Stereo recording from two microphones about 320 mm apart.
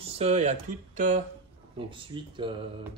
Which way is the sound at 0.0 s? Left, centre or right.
Centre.